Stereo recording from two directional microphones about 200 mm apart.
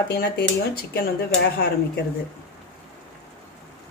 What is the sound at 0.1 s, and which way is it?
A woman's voice, 50° left (ahead or behind).